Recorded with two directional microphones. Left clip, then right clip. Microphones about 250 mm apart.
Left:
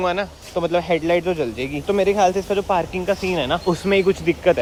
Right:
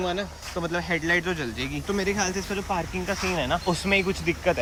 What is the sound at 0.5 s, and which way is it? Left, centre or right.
Speech, left.